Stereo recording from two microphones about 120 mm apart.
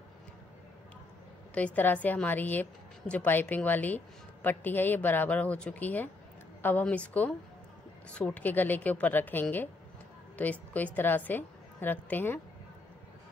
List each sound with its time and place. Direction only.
1.5 s a woman's voice: 10° left (ahead or behind)